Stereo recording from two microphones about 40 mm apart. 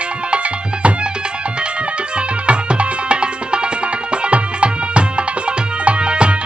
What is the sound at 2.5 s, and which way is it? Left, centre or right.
Music, right.